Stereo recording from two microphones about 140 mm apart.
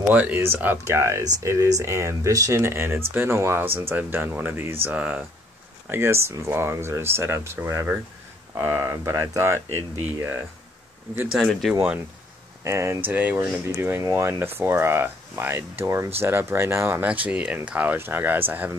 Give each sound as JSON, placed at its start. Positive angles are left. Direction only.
{"t": 0.1, "sound": "speech", "side_deg": -15}
{"t": 11.3, "sound": "speech", "side_deg": 0}
{"t": 12.6, "sound": "speech", "side_deg": -20}